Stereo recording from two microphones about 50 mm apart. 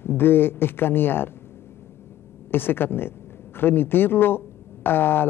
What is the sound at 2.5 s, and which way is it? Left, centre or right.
A man's voice, left.